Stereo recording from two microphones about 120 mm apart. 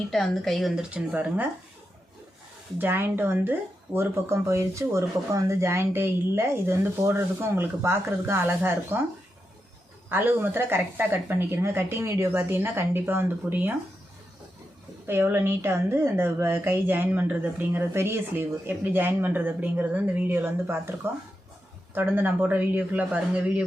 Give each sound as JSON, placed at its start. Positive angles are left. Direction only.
{"t": 0.1, "sound": "speech", "side_deg": 0}
{"t": 2.7, "sound": "speech", "side_deg": -15}
{"t": 10.1, "sound": "speech", "side_deg": -15}
{"t": 15.0, "sound": "a woman's voice", "side_deg": -20}